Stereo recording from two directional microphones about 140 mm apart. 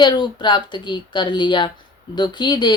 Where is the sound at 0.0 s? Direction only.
30° left (ahead or behind).